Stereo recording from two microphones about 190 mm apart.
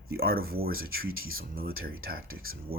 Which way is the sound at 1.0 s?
90° right.